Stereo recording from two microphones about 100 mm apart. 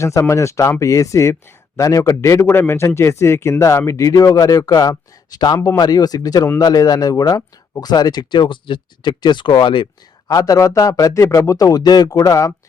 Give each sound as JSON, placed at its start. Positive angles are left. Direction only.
{"t": 0.0, "sound": "a man's voice", "side_deg": 30}
{"t": 10.3, "sound": "speech", "side_deg": 35}